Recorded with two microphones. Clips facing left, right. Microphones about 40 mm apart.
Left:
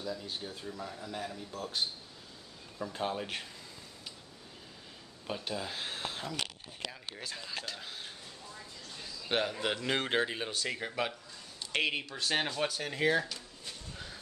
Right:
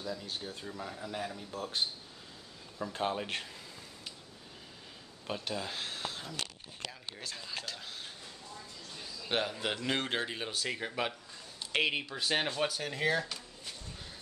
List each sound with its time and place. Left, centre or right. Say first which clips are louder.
0.0 s speech: even; centre
0.7 s speech: even; centre
2.8 s speech: right 1 dB; centre
5.5 s speech: even; centre
5.9 s a sound: left 1 dB; left
6.9 s speech: left 1 dB; centre